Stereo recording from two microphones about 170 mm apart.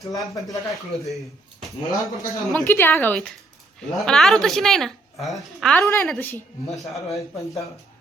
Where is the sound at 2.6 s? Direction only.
15° left (ahead or behind).